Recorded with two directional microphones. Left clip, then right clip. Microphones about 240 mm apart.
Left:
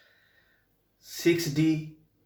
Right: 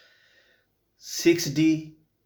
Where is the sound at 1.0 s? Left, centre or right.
Right.